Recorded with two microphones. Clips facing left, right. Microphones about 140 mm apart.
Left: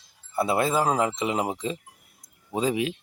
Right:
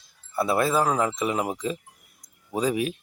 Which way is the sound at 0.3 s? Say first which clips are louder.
Right 1 dB; 20° left (ahead or behind).